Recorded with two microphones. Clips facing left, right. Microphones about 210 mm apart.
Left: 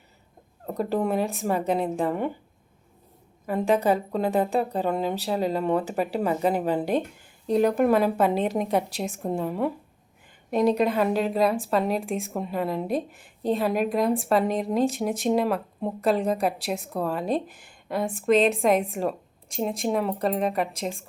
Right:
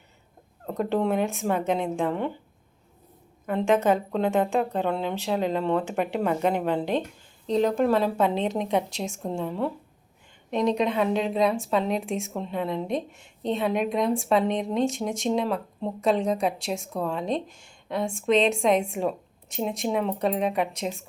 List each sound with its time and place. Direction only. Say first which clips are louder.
0.7 s a woman's voice: even; 5° left (ahead or behind)
1.6 s a woman's voice: left 1 dB; 35° left (ahead or behind)
2.0 s a woman's voice: left 1 dB; 5° left (ahead or behind)
3.4 s a woman's voice: even; 5° left (ahead or behind)